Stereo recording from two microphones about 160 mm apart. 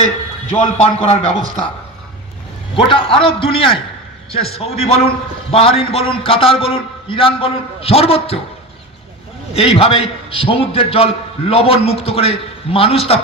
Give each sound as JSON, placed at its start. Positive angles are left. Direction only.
{"t": 0.5, "sound": "a man's voice", "side_deg": 40}
{"t": 2.7, "sound": "a man's voice", "side_deg": 35}
{"t": 9.5, "sound": "a man's voice", "side_deg": 35}